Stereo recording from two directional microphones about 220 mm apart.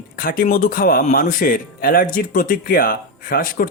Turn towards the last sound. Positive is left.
turn(degrees=40)  # may be behind; listen again after turning